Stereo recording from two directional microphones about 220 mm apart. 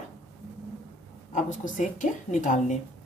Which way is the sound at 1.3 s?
35° left (ahead or behind).